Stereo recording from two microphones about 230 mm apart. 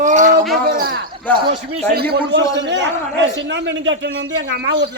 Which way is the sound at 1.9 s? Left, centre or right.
Right.